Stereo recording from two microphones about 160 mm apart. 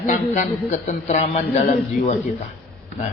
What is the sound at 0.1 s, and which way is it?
Speech, 50° left (ahead or behind).